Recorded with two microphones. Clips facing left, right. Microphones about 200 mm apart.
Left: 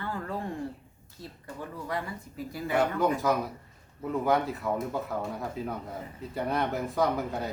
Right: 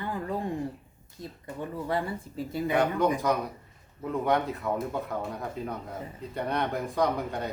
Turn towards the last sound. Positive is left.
turn(degrees=0)  # may be behind; listen again after turning